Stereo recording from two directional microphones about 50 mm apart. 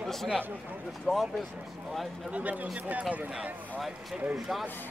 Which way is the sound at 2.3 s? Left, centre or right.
Right.